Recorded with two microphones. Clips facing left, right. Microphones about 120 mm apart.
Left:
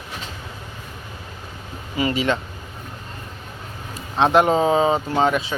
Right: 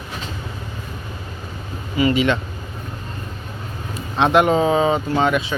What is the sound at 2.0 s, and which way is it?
Speech, 35° left (ahead or behind).